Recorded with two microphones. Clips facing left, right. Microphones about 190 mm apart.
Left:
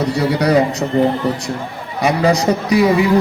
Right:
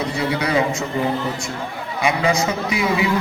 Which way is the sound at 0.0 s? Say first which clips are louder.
Left 6 dB; 40° left (ahead or behind).